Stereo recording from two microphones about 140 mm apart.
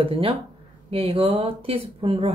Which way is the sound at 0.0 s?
40° right (ahead or behind).